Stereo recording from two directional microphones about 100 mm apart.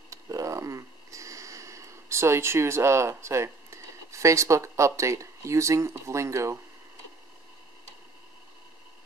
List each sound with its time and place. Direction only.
0.1 s sniff: 35° right (ahead or behind)